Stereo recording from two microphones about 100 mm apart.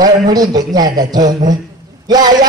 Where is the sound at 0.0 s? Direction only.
40° right (ahead or behind).